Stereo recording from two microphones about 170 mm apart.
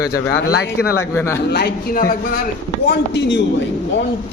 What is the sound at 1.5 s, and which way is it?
Speech, 70° left (ahead or behind).